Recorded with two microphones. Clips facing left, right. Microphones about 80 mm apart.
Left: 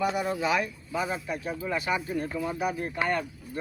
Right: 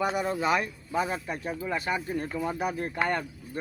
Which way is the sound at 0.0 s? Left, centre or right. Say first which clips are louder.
Even; right.